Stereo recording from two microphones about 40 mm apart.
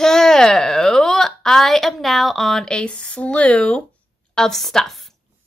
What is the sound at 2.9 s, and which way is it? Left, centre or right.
Speech, left.